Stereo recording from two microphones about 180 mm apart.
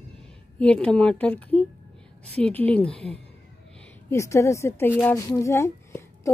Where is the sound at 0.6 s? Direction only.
5° left (ahead or behind).